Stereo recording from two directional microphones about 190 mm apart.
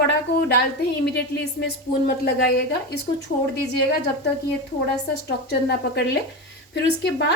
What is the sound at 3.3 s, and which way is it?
Speech, 60° left (ahead or behind).